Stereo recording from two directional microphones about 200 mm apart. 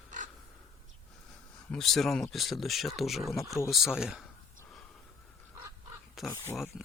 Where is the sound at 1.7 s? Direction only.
Centre (ahead or behind).